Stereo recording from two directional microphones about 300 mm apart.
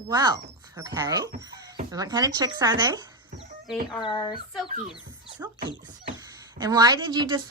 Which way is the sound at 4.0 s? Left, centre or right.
Centre.